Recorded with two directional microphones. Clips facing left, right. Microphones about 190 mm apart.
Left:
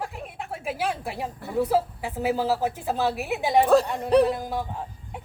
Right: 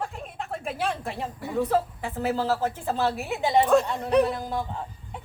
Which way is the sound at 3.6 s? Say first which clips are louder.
Left 2 dB; 35° left (ahead or behind).